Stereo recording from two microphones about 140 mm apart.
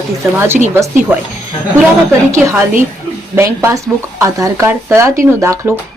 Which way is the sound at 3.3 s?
15° right (ahead or behind).